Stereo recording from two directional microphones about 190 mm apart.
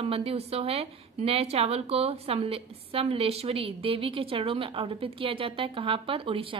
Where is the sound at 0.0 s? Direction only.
30° right (ahead or behind).